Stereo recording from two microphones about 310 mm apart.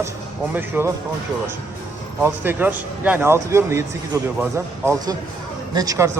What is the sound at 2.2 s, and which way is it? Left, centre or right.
A man's voice, centre.